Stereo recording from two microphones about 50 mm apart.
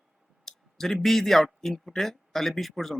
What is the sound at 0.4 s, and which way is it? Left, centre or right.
Speech, centre.